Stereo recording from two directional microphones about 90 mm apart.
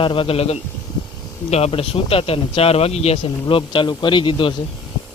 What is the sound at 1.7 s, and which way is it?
Speech, 90° left.